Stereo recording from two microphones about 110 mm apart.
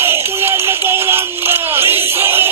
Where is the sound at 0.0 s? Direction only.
20° right (ahead or behind).